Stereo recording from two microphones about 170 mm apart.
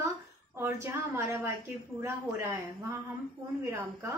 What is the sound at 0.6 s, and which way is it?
A woman's voice, 15° right (ahead or behind).